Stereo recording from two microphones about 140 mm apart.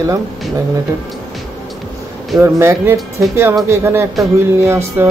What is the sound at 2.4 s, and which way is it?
Speech, 20° right (ahead or behind).